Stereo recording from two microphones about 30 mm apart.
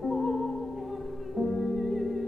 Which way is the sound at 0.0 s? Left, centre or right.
Centre.